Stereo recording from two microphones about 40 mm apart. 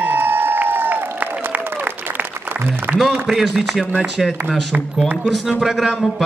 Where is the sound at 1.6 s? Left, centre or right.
Right.